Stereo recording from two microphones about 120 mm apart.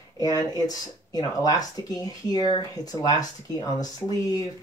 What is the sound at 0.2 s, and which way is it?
Speech, 30° left (ahead or behind).